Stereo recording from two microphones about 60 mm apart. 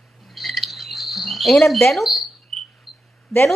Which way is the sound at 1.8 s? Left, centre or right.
Centre.